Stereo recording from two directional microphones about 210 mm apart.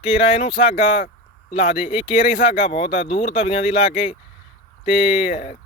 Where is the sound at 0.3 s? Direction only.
25° left (ahead or behind).